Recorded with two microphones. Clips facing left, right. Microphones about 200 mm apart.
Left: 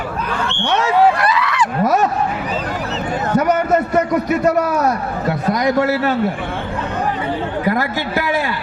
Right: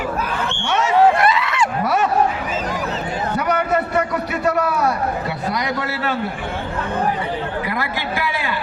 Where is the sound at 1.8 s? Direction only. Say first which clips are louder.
Left 5 dB; 40° left (ahead or behind).